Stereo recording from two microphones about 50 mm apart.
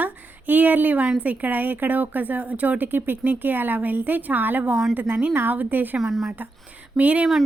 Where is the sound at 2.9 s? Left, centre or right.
Right.